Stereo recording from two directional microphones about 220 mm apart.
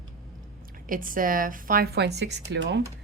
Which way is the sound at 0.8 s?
40° right (ahead or behind).